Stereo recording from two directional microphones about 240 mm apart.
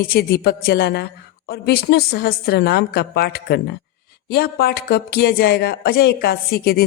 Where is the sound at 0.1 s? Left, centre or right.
Left.